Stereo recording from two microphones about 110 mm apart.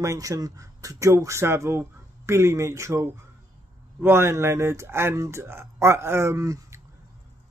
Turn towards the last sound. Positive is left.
turn(degrees=-30)  # may be behind; listen again after turning